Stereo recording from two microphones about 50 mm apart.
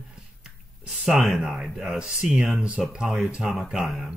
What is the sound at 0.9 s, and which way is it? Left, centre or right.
Speech, centre.